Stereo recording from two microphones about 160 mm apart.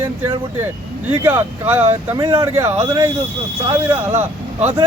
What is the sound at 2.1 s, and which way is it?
Speech, 30° right (ahead or behind).